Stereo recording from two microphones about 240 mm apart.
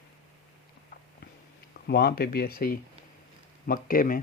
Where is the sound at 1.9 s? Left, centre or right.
Left.